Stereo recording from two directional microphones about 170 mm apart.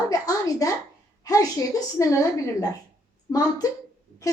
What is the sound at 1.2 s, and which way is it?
A woman's voice, 20° left (ahead or behind).